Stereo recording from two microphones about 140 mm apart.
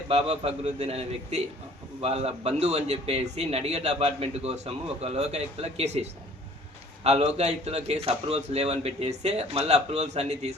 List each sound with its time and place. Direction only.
0.1 s a man's voice: 45° right (ahead or behind)